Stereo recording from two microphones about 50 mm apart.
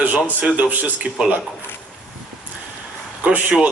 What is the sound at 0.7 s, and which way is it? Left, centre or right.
Speech, right.